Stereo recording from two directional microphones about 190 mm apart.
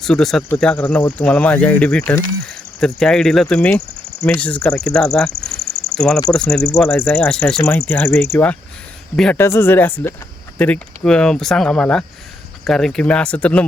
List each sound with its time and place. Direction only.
0.0 s speech: centre (ahead or behind)
5.3 s cricket: 50° right (ahead or behind)
6.3 s speech: 5° left (ahead or behind)